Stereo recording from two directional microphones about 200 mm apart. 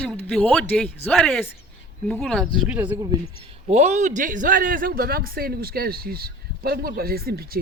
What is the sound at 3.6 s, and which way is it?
A man's voice, 35° right (ahead or behind).